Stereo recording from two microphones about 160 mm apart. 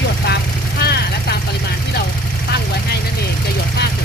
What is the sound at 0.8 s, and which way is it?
Vehicle, 90° left.